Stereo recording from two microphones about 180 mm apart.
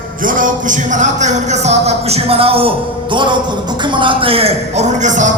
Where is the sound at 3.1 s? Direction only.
25° right (ahead or behind).